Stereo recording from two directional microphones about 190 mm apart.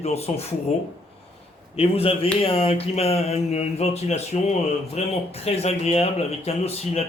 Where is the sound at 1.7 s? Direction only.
30° left (ahead or behind).